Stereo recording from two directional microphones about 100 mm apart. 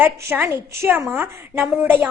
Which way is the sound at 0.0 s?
20° right (ahead or behind).